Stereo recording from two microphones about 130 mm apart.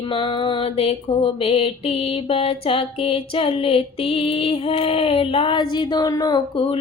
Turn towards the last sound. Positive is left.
turn(degrees=45)  # may be behind; listen again after turning